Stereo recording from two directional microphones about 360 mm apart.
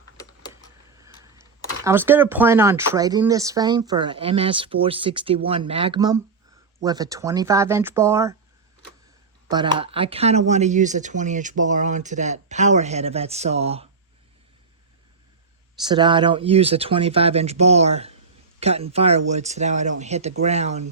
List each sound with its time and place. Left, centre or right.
0.9 s a sound: centre
1.8 s speech: centre
9.5 s speech: centre
15.8 s speech: centre